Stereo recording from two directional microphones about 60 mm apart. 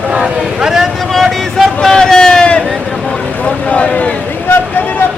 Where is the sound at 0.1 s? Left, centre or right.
Centre.